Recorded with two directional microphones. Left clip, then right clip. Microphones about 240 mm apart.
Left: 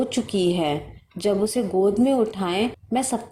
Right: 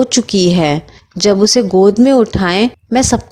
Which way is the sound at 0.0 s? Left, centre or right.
Right.